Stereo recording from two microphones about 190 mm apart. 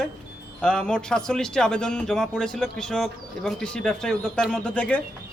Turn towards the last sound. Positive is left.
turn(degrees=5)  # may be behind; listen again after turning